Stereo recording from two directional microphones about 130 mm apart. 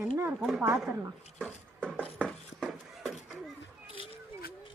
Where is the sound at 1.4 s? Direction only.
10° left (ahead or behind).